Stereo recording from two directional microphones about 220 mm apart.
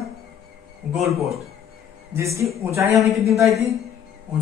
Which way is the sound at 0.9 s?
Centre (ahead or behind).